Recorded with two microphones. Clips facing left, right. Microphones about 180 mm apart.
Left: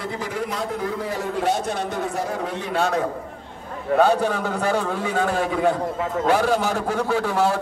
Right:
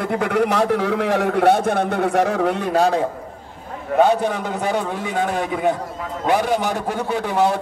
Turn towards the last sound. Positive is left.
turn(degrees=-20)  # may be behind; listen again after turning